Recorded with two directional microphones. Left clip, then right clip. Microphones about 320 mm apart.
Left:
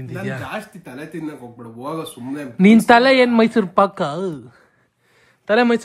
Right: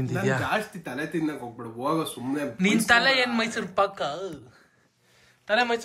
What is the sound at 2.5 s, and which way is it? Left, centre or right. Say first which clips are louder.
Speech: left 9 dB; centre.